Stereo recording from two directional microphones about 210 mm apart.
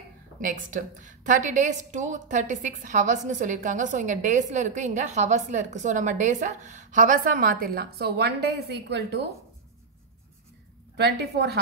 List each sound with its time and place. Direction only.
0.4 s a woman's voice: 40° right (ahead or behind)
11.0 s a woman's voice: 50° right (ahead or behind)